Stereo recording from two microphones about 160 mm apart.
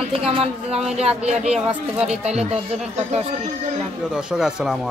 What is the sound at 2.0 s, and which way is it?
Speech, 40° right (ahead or behind).